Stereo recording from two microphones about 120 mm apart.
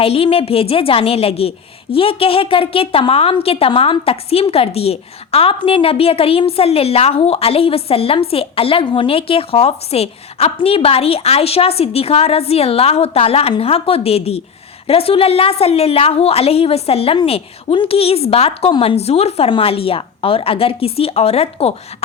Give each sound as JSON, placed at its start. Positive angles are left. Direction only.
{"t": 0.0, "sound": "a woman's voice", "side_deg": 50}